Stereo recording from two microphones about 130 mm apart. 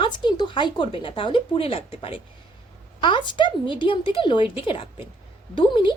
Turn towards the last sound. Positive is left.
turn(degrees=40)  # may be behind; listen again after turning